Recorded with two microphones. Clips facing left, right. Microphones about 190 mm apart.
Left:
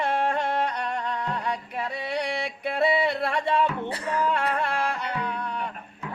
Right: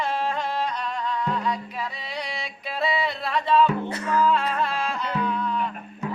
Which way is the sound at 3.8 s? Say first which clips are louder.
Right 3 dB; 30° left (ahead or behind).